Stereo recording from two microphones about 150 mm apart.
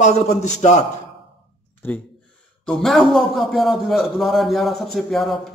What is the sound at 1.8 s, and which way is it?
Speech, 15° left (ahead or behind).